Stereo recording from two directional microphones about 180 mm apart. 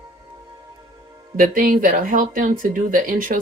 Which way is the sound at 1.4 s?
50° right (ahead or behind).